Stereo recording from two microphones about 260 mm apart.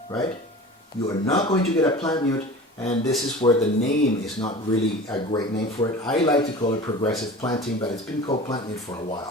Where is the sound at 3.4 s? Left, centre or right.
Left.